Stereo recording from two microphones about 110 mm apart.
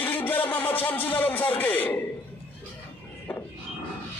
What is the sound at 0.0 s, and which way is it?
Speech, 15° left (ahead or behind).